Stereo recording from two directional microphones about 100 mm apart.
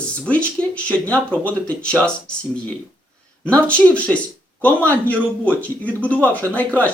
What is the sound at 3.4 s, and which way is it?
Speech, 15° left (ahead or behind).